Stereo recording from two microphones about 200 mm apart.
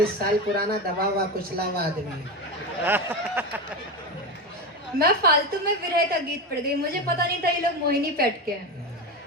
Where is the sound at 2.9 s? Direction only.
10° right (ahead or behind).